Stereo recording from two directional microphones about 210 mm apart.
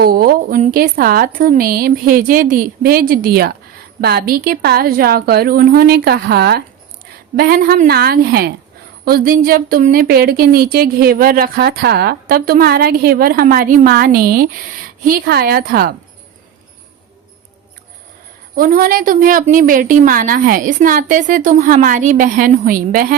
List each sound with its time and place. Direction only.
0.0 s a woman's voice: 45° right (ahead or behind)
18.5 s a woman's voice: 45° right (ahead or behind)